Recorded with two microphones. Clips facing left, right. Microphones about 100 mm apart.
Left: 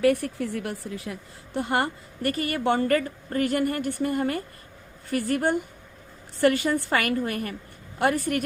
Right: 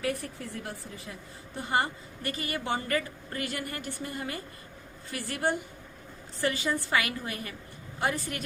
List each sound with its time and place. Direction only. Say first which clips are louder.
0.0 s speech: left 11 dB; 70° left (ahead or behind)
1.5 s a woman's voice: left 4 dB; 60° left (ahead or behind)
6.4 s a woman's voice: left 8 dB; 60° left (ahead or behind)